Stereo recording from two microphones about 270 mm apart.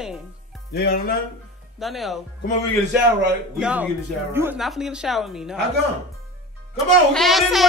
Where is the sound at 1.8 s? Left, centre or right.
Centre.